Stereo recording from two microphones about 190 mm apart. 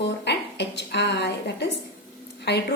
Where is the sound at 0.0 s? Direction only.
65° left (ahead or behind).